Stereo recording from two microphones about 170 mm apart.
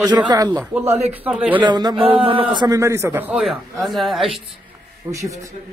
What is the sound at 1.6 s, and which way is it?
A man's voice, 25° right (ahead or behind).